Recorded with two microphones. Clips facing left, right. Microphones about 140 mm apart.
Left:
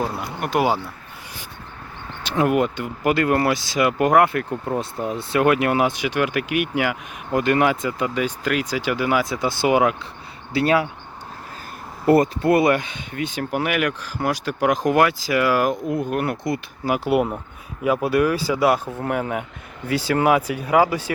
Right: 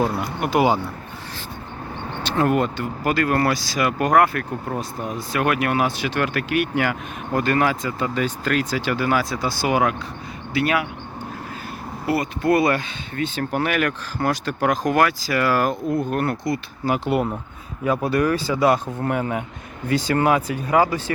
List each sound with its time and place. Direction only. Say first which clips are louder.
0.3 s speech: right 1 dB; centre (ahead or behind)
2.2 s speech: left 1 dB; 10° left (ahead or behind); by 10.8 s 30° left (ahead or behind)
12.0 s speech: left 7 dB; 45° left (ahead or behind)
12.4 s speech: left 1 dB; 20° left (ahead or behind)